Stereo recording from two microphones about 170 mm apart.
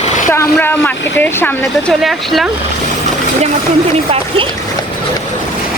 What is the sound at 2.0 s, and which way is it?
Speech, centre (ahead or behind).